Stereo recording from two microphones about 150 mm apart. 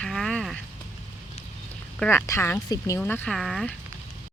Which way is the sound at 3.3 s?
Centre (ahead or behind).